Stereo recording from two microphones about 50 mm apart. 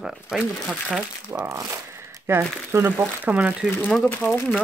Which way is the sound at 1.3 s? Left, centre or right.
Right.